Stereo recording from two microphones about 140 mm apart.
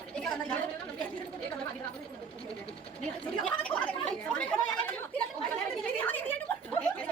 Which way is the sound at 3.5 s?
10° left (ahead or behind).